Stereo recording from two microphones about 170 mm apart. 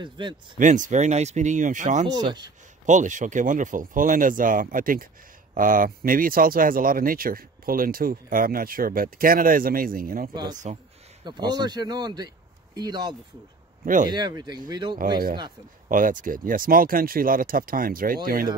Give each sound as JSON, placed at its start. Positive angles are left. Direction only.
{"t": 0.0, "sound": "speech", "side_deg": -30}
{"t": 0.6, "sound": "speech", "side_deg": -50}
{"t": 2.0, "sound": "speech", "side_deg": -25}
{"t": 2.9, "sound": "speech", "side_deg": -45}
{"t": 11.2, "sound": "speech", "side_deg": -25}
{"t": 15.9, "sound": "speech", "side_deg": -50}